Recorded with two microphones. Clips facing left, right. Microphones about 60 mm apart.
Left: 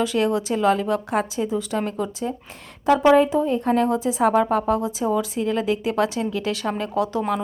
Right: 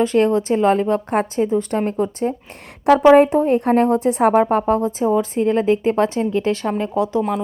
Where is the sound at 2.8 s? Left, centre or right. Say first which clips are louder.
Right 5 dB; right.